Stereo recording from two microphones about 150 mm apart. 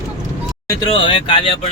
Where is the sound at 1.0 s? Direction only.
35° left (ahead or behind).